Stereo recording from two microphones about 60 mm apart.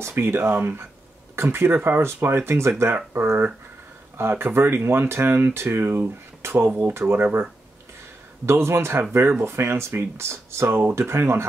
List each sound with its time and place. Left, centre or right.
0.0 s speech: right
8.5 s speech: right